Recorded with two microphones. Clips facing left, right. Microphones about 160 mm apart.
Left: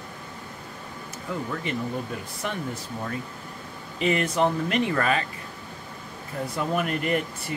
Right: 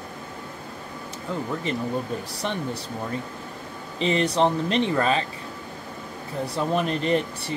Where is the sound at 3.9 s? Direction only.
30° right (ahead or behind).